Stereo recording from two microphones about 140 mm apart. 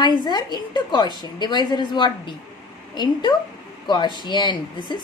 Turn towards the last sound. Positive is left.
turn(degrees=30)  # may be behind; listen again after turning